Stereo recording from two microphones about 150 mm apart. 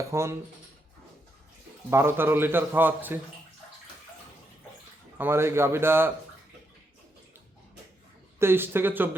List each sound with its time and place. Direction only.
0.1 s speech: 20° right (ahead or behind)
1.9 s a man's voice: 15° right (ahead or behind)
5.1 s a man's voice: 15° right (ahead or behind)
8.4 s a man's voice: 15° right (ahead or behind)